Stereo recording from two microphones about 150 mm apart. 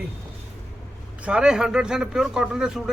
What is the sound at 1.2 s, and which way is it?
Speech, 5° right (ahead or behind).